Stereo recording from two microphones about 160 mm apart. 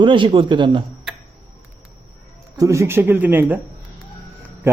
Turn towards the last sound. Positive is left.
turn(degrees=-15)  # may be behind; listen again after turning